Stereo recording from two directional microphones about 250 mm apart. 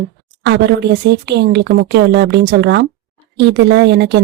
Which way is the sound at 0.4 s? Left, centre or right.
Right.